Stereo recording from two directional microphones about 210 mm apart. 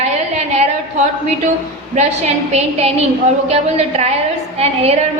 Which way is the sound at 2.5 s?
30° right (ahead or behind).